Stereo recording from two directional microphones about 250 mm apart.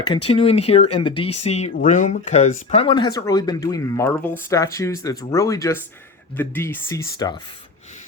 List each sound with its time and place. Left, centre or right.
0.1 s speech: left